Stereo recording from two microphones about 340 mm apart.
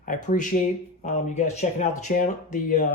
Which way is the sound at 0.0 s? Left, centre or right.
Left.